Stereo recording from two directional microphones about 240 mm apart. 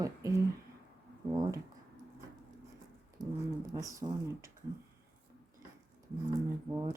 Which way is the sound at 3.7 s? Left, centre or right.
Centre.